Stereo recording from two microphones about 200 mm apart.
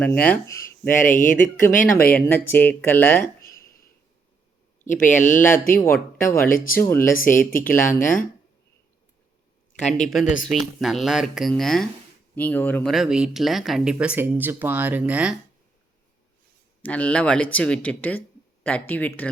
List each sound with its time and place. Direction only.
0.0 s speech: 10° left (ahead or behind)
0.9 s speech: 40° left (ahead or behind)
2.1 s speech: 10° left (ahead or behind)
4.9 s speech: 40° left (ahead or behind)
6.7 s speech: 10° left (ahead or behind)
7.1 s speech: 45° left (ahead or behind)
10.1 s speech: centre (ahead or behind)
16.8 s speech: 5° left (ahead or behind)